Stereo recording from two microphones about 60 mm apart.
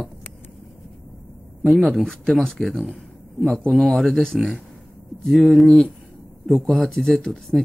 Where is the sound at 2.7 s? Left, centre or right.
Centre.